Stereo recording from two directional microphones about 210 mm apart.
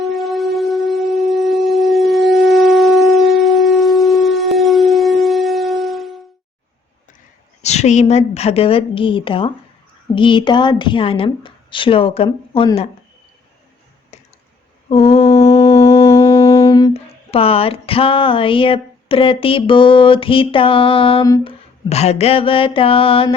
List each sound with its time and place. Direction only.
0.0 s wind instrument: centre (ahead or behind)
7.6 s speech: 30° left (ahead or behind)
14.1 s a sound: 30° left (ahead or behind)
14.8 s mantra: 30° left (ahead or behind)
16.0 s speech: 15° left (ahead or behind)
21.8 s speech: 30° left (ahead or behind)